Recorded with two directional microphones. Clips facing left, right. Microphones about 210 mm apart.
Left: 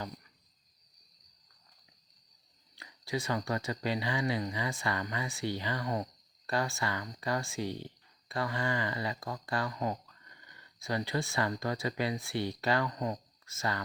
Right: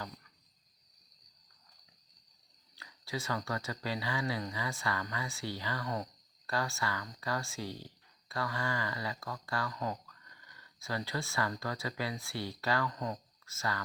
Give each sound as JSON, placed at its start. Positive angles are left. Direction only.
{"t": 2.7, "sound": "speech", "side_deg": 20}